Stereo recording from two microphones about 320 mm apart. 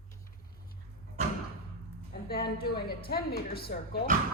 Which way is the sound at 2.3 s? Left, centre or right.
Left.